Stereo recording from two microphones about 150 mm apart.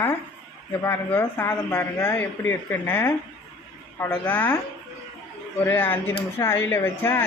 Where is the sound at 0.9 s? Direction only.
15° left (ahead or behind).